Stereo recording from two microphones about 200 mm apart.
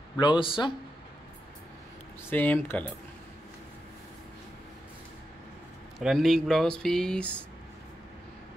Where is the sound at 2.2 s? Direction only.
10° left (ahead or behind).